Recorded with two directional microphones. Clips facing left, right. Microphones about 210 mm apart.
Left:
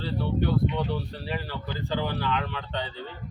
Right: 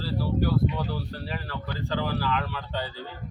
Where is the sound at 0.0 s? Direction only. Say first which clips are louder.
Even; 5° right (ahead or behind).